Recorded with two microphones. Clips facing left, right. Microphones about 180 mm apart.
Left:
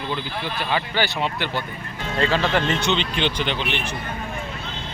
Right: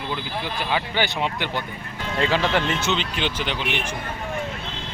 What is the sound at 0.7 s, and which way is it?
Speech, 15° right (ahead or behind).